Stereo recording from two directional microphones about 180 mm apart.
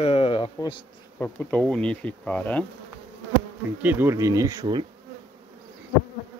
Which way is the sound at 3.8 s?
10° right (ahead or behind).